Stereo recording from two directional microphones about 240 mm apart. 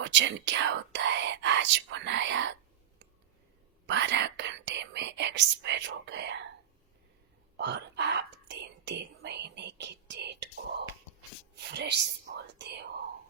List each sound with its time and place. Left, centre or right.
0.0 s speech: right
3.8 s speech: right
7.5 s whispering: right